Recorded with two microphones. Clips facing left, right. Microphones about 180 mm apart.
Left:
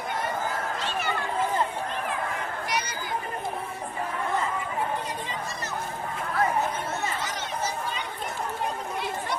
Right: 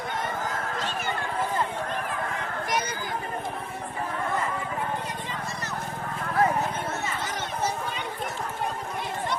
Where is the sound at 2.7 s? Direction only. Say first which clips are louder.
Right 4 dB; 50° right (ahead or behind).